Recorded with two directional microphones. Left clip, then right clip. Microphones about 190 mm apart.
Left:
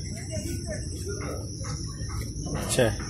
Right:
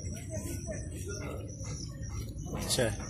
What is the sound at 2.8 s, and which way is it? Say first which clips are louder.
Speech: left 8 dB; 25° left (ahead or behind).